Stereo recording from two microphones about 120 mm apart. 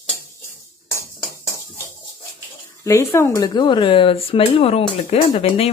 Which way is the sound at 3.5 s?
40° left (ahead or behind).